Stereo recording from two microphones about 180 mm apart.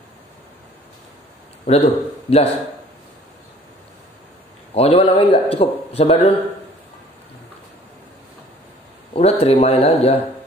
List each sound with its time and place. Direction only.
1.7 s speech: 35° left (ahead or behind)
4.7 s speech: 35° left (ahead or behind)
9.1 s speech: 35° left (ahead or behind)